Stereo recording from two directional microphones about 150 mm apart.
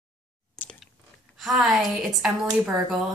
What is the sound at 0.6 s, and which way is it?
Chewing, 15° left (ahead or behind).